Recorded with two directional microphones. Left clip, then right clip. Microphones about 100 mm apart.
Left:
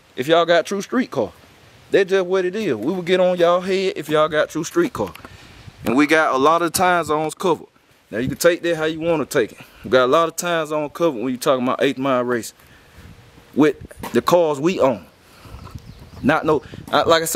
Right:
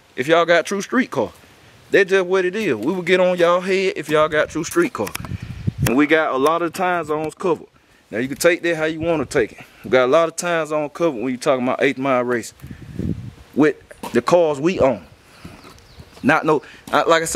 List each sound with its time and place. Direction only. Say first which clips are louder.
0.1 s a man's voice: even; centre (ahead or behind)
5.9 s speech: left 1 dB; 55° left (ahead or behind)
7.0 s speech: left 2 dB; 25° left (ahead or behind)
8.1 s a man's voice: even; centre (ahead or behind)
13.6 s speech: even; 5° left (ahead or behind)
16.3 s a man's voice: right 1 dB; centre (ahead or behind)